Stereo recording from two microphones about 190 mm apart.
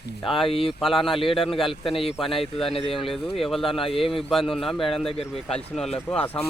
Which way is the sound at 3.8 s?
30° left (ahead or behind).